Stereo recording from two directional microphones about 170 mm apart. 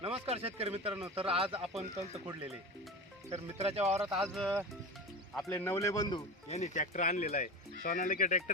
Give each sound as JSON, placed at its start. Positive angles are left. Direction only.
{"t": 0.0, "sound": "speech", "side_deg": -35}
{"t": 3.6, "sound": "speech", "side_deg": -35}
{"t": 4.0, "sound": "a man's voice", "side_deg": 0}
{"t": 6.5, "sound": "speech", "side_deg": 45}
{"t": 7.9, "sound": "speech", "side_deg": 55}